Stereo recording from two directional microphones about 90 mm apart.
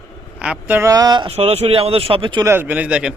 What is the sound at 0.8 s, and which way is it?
Speech, 40° right (ahead or behind).